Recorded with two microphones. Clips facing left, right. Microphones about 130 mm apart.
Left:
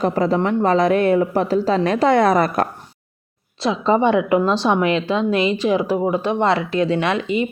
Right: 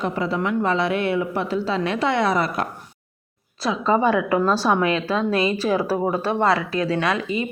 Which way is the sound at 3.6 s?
25° left (ahead or behind).